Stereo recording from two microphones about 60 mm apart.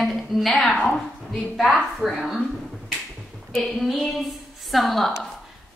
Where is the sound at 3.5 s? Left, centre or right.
Centre.